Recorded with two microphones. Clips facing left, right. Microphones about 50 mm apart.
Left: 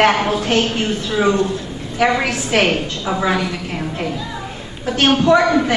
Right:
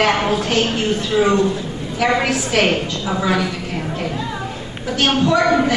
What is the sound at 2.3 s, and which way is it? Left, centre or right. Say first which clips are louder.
A woman's voice: even; left.